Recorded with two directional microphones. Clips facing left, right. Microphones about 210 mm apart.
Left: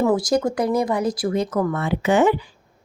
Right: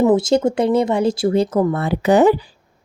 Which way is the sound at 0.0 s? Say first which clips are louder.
Right 5 dB; 20° right (ahead or behind).